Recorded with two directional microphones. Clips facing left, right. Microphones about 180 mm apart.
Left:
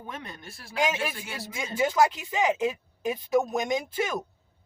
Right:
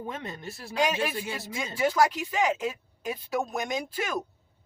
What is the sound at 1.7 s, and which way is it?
Speech, 20° left (ahead or behind).